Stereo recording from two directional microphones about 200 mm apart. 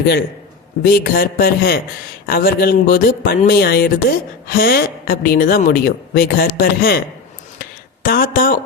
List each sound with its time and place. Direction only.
0.9 s a woman's voice: 50° left (ahead or behind)
8.0 s a woman's voice: 45° left (ahead or behind)